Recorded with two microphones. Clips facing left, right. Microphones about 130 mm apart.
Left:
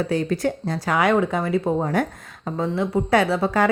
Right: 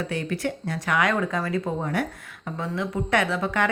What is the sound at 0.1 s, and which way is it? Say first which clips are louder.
A woman's voice: left 6 dB; 35° left (ahead or behind).